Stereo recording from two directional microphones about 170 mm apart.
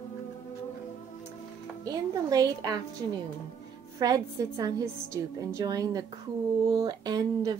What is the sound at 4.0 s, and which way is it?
A woman's voice, 20° right (ahead or behind).